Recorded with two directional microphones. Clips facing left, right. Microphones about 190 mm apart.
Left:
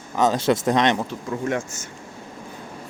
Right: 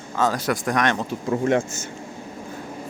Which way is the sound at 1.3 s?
35° right (ahead or behind).